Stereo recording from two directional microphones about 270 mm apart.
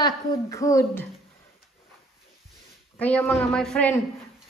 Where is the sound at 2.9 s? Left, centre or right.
Centre.